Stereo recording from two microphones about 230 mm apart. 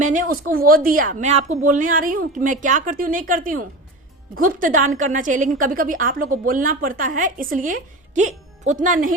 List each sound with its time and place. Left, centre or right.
0.0 s speech: right